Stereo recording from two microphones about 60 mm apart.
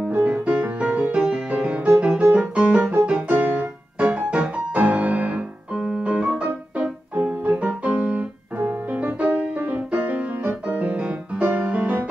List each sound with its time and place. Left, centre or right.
0.1 s music: right
2.3 s piano: centre
3.1 s music: right
8.5 s music: right